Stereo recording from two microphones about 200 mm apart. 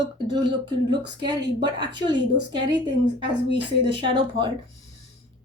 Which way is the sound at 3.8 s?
25° right (ahead or behind).